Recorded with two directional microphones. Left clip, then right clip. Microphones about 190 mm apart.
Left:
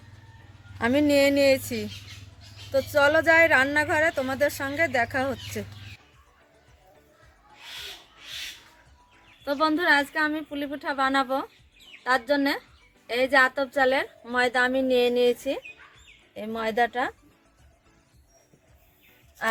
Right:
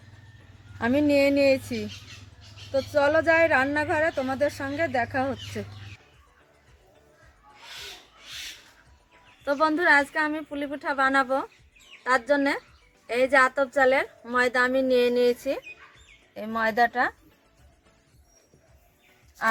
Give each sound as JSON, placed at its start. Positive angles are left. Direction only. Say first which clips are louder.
{"t": 0.8, "sound": "a woman's voice", "louder": "left 1 dB", "side_deg": 10}
{"t": 9.4, "sound": "a woman's voice", "louder": "right 1 dB", "side_deg": 5}
{"t": 19.4, "sound": "a sound", "louder": "right 2 dB", "side_deg": 15}